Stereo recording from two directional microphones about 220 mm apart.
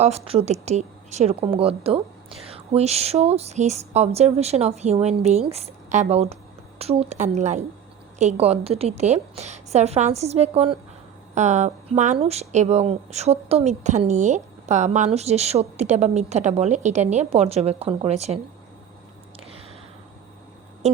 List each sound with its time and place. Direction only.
0.0 s speech: 30° right (ahead or behind)